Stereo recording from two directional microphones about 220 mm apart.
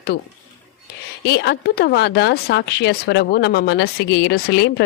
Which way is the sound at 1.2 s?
50° left (ahead or behind).